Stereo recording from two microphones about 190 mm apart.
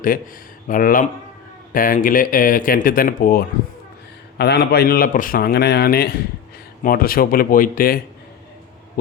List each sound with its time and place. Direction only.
0.7 s a man's voice: 45° left (ahead or behind)